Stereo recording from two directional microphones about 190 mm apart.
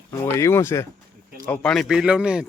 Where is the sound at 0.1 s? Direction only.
15° left (ahead or behind).